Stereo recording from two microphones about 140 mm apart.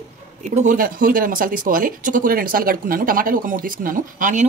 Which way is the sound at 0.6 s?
75° right (ahead or behind).